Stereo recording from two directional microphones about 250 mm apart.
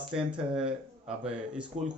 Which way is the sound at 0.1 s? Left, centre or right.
Centre.